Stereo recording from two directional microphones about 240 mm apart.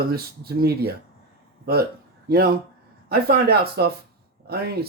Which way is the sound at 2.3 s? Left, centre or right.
Right.